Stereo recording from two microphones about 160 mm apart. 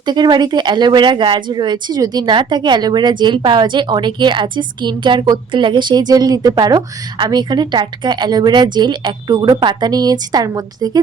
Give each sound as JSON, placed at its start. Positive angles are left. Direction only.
{"t": 0.0, "sound": "speech", "side_deg": -25}